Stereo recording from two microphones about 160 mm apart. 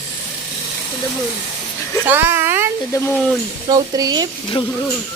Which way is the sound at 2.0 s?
15° right (ahead or behind).